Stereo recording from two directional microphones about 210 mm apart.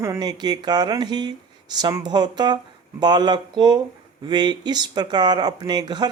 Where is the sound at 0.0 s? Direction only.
15° right (ahead or behind).